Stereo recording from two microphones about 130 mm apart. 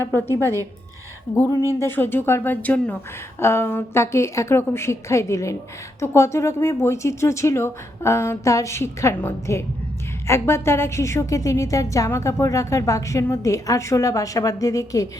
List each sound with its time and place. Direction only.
0.0 s a woman's voice: 15° left (ahead or behind)
1.8 s a woman's voice: 15° left (ahead or behind)